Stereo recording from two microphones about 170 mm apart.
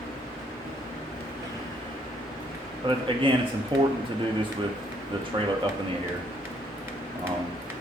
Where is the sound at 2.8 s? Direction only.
30° right (ahead or behind).